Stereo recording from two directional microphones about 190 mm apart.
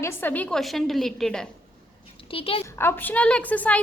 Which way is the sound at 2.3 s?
30° left (ahead or behind).